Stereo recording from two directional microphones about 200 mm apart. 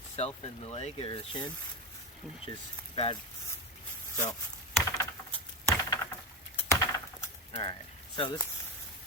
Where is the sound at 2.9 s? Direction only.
25° left (ahead or behind).